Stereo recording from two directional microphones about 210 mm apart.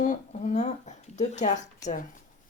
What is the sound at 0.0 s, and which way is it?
Speech, 35° left (ahead or behind).